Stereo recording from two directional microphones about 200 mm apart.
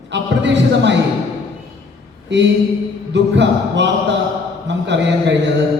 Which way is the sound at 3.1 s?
60° right (ahead or behind).